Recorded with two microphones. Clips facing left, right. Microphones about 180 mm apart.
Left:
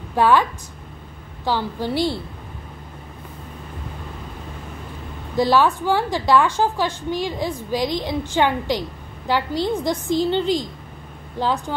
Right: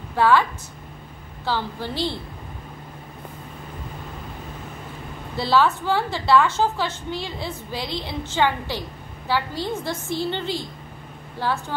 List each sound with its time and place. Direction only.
0.1 s a woman's voice: 15° left (ahead or behind)
5.3 s a woman's voice: 15° left (ahead or behind)